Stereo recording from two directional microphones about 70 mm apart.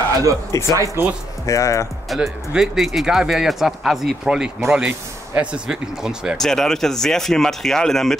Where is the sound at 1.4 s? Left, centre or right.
Left.